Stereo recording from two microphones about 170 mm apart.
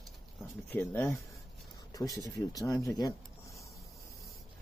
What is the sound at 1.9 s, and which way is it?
Speech, 20° left (ahead or behind).